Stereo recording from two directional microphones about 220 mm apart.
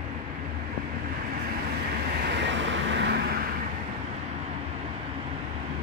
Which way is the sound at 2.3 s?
55° right (ahead or behind).